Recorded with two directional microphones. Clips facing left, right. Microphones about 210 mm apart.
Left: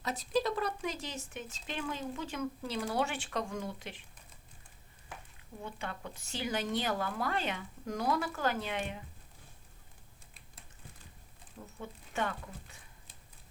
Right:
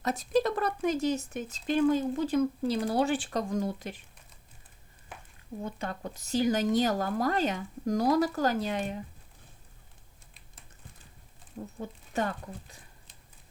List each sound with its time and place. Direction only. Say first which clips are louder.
0.0 s speech: right 5 dB; 50° right (ahead or behind)
5.6 s speech: right 5 dB; 40° right (ahead or behind)
11.8 s speech: right 4 dB; 40° right (ahead or behind)